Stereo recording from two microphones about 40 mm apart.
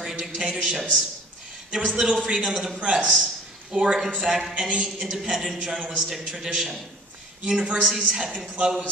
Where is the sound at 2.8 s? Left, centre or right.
Right.